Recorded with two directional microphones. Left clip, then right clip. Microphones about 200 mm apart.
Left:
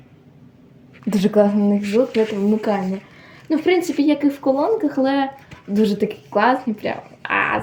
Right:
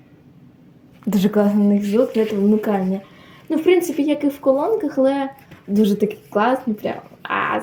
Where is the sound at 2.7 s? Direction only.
10° right (ahead or behind).